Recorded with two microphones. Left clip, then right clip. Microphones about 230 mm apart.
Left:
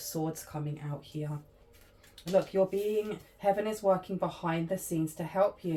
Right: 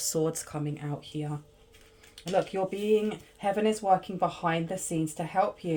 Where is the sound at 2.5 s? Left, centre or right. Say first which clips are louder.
Right 2 dB; right.